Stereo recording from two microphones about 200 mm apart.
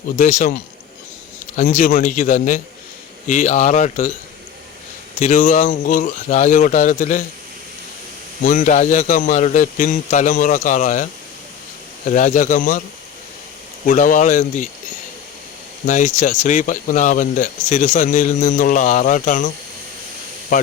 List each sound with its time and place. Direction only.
0.2 s speech: 40° left (ahead or behind)
1.5 s speech: 40° left (ahead or behind)
5.2 s speech: 40° left (ahead or behind)
8.4 s speech: 40° left (ahead or behind)
12.1 s speech: 40° left (ahead or behind)
13.8 s speech: 40° left (ahead or behind)
15.9 s speech: 40° left (ahead or behind)